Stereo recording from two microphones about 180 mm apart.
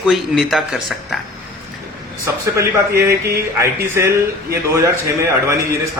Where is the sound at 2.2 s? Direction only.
15° right (ahead or behind).